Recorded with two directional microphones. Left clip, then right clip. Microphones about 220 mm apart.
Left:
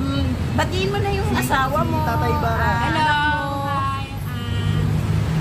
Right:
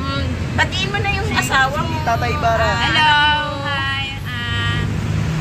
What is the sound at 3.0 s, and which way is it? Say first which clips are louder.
Female singing: right 7 dB; 10° left (ahead or behind).